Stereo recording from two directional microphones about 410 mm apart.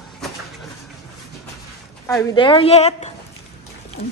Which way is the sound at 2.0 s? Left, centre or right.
Centre.